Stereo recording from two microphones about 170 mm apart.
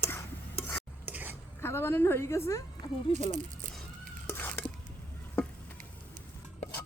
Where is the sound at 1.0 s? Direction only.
10° right (ahead or behind).